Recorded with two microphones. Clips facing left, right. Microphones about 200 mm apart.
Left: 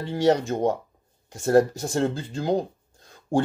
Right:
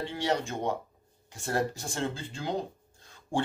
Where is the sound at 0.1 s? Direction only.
40° left (ahead or behind).